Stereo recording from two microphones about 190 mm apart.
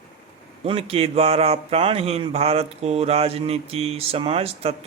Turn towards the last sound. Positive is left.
turn(degrees=-30)  # may be behind; listen again after turning